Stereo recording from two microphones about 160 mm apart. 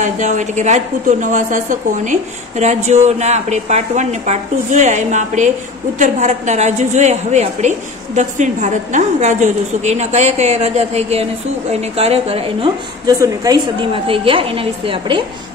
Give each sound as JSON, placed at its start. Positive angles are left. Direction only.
{"t": 0.0, "sound": "a woman's voice", "side_deg": -50}
{"t": 13.0, "sound": "a woman's voice", "side_deg": -20}